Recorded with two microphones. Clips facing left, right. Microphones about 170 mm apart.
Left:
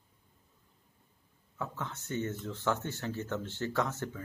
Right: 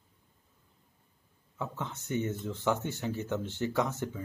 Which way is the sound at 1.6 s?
15° right (ahead or behind).